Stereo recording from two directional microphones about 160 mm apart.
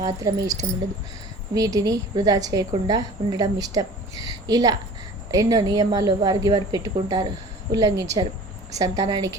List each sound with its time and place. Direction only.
0.0 s a woman's voice: 20° right (ahead or behind)